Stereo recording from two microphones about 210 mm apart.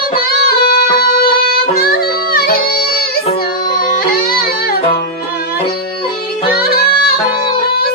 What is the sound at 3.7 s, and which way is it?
Music, 40° left (ahead or behind).